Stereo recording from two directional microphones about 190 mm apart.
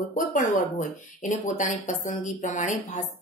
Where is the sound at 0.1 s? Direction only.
40° left (ahead or behind).